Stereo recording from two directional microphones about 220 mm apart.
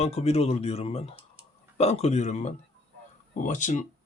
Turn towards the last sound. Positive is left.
turn(degrees=35)  # may be behind; listen again after turning